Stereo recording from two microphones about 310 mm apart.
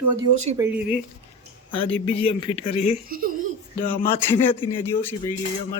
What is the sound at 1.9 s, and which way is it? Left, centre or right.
Speech, centre.